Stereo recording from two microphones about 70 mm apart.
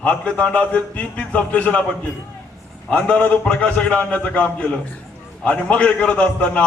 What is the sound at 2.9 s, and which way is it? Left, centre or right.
A man's voice, centre.